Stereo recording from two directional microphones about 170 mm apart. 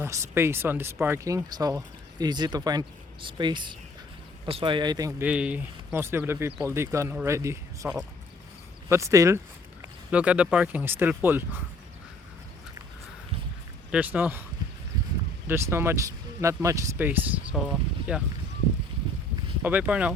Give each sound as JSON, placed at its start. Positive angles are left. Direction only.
{"t": 0.0, "sound": "speech", "side_deg": -15}
{"t": 5.2, "sound": "speech", "side_deg": -10}
{"t": 8.9, "sound": "speech", "side_deg": -15}
{"t": 10.1, "sound": "speech", "side_deg": -5}
{"t": 13.9, "sound": "speech", "side_deg": -10}
{"t": 15.4, "sound": "speech", "side_deg": -15}
{"t": 19.6, "sound": "speech", "side_deg": -10}